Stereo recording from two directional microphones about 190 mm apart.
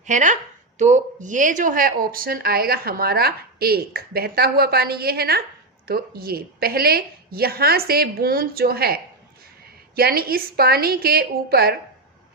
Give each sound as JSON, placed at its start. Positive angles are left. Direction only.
{"t": 0.0, "sound": "speech", "side_deg": -40}